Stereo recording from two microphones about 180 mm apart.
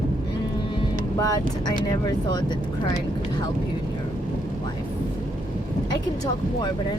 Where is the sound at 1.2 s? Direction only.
20° left (ahead or behind).